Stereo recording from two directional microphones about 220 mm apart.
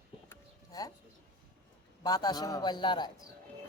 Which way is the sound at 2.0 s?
15° left (ahead or behind).